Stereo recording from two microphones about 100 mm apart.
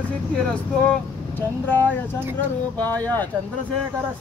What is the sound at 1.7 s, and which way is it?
Speech, 20° left (ahead or behind).